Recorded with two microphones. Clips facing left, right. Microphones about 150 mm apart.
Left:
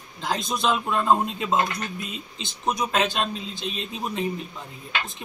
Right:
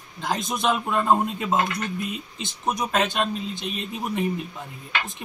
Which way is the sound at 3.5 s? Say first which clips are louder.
Right 1 dB; 55° right (ahead or behind).